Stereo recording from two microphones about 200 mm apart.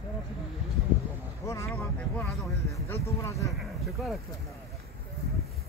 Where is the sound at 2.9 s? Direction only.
15° left (ahead or behind).